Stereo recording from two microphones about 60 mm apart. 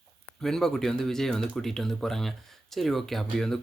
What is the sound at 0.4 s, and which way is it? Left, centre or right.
Speech, centre.